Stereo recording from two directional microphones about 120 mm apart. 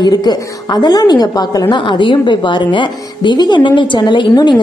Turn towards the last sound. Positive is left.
turn(degrees=40)  # may be behind; listen again after turning